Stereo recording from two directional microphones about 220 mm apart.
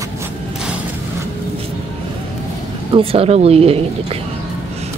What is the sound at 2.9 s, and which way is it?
Speech, 25° right (ahead or behind).